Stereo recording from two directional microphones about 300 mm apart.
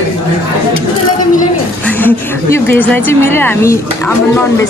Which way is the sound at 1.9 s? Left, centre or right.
Centre.